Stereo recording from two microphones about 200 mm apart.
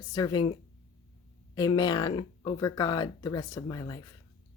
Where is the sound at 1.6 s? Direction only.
20° left (ahead or behind).